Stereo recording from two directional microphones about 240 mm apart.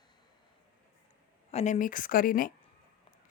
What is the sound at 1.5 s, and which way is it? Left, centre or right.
Speech, left.